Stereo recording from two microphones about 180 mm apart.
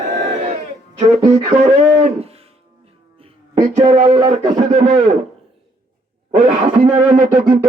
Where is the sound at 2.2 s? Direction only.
35° right (ahead or behind).